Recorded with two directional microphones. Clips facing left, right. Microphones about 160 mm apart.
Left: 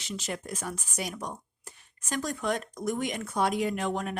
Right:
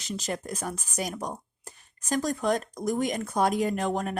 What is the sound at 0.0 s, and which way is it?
Speech, 40° right (ahead or behind).